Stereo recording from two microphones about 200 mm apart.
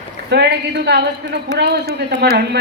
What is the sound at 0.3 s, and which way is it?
Speech, 55° right (ahead or behind).